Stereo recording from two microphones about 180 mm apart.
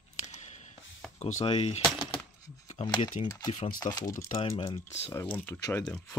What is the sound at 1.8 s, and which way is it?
Speech, centre (ahead or behind).